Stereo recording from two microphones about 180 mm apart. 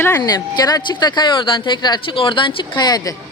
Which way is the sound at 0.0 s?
20° left (ahead or behind).